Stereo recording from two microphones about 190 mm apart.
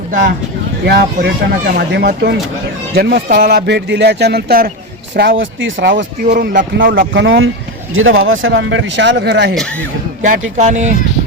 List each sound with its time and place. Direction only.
0.9 s speech: 60° right (ahead or behind); by 5.9 s 90° right
6.2 s speech: 40° right (ahead or behind)
7.1 s speech: 75° right (ahead or behind); by 9.6 s 60° right (ahead or behind)
10.2 s speech: 40° right (ahead or behind)